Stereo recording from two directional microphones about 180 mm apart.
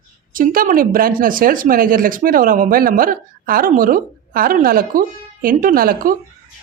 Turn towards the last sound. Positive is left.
turn(degrees=-55)  # may be behind; listen again after turning